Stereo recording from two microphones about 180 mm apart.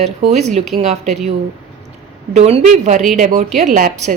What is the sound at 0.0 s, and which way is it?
Speech, 40° right (ahead or behind).